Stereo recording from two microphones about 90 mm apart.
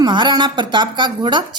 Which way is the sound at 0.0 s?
55° right (ahead or behind).